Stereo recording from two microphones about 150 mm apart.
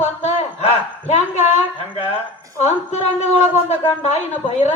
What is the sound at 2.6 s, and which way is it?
Speech, 45° left (ahead or behind).